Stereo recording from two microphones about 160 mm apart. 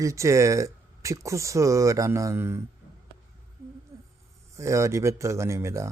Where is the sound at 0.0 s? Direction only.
20° right (ahead or behind).